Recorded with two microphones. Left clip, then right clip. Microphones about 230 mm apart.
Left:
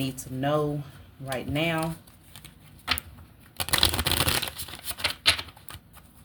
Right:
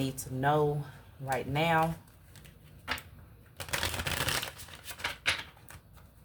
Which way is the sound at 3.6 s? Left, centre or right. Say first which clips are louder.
Left 9 dB; left.